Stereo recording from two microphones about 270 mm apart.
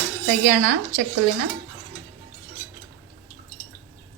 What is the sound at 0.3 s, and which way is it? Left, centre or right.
Speech, right.